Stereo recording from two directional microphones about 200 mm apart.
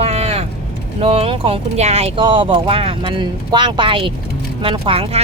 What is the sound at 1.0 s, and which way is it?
Speech, 30° right (ahead or behind).